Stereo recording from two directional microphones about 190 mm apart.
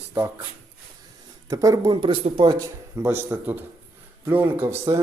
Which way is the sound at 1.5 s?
15° right (ahead or behind).